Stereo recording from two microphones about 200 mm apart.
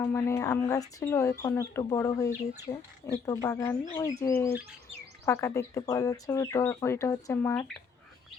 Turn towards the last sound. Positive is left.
turn(degrees=10)  # may be behind; listen again after turning